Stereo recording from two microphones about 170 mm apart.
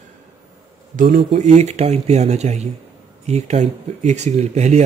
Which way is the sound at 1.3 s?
40° right (ahead or behind).